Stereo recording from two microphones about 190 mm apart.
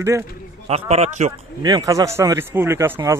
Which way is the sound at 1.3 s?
20° right (ahead or behind).